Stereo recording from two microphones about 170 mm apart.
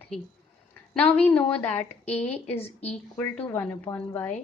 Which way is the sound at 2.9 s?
5° left (ahead or behind).